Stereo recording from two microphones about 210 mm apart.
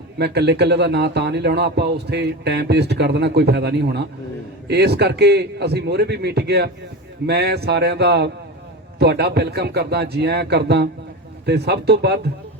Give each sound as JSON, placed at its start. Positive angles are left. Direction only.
{"t": 0.2, "sound": "speech", "side_deg": -50}